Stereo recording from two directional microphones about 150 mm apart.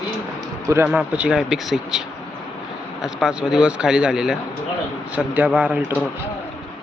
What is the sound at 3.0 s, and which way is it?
Speech, 5° right (ahead or behind).